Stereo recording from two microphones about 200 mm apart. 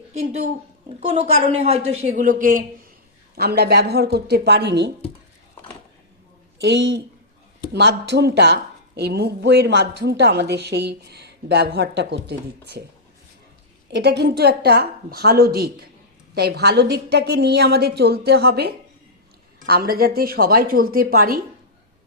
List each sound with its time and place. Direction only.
0.2 s a man's voice: 35° right (ahead or behind); by 4.9 s 55° right (ahead or behind)
6.6 s speech: 60° right (ahead or behind)
13.9 s a woman's voice: 55° right (ahead or behind)